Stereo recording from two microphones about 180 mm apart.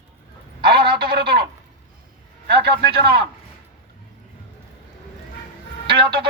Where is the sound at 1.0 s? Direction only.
55° right (ahead or behind).